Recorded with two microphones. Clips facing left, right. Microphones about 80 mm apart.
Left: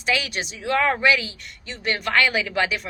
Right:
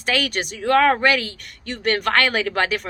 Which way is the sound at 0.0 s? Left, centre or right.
Right.